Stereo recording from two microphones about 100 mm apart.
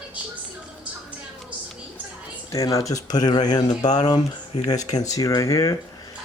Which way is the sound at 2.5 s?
35° left (ahead or behind).